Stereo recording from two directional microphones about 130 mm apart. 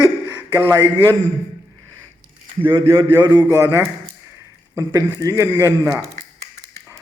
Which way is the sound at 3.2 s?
35° right (ahead or behind).